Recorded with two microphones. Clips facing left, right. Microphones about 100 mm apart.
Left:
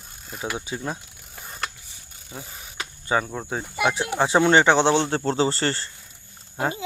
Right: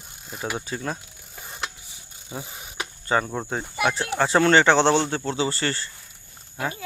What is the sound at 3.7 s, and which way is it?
Speech, 15° left (ahead or behind).